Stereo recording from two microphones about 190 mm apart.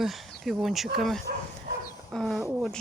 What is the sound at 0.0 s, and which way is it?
Speech, centre (ahead or behind).